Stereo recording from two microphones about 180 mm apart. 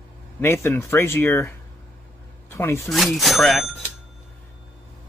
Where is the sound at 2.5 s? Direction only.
15° left (ahead or behind).